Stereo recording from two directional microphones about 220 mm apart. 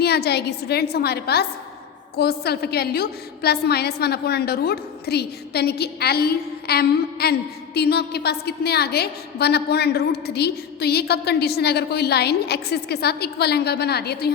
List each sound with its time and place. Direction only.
0.0 s a woman's voice: 45° left (ahead or behind)